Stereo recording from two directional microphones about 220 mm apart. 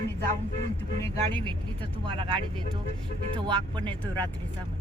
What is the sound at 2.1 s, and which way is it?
Speech, 25° right (ahead or behind).